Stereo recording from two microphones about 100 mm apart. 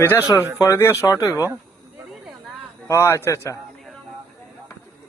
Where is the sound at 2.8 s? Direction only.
30° left (ahead or behind).